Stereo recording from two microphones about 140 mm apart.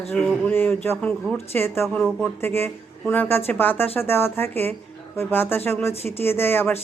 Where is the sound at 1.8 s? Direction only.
5° left (ahead or behind).